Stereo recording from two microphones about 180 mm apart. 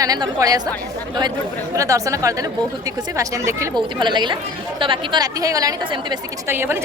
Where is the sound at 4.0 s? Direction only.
25° right (ahead or behind).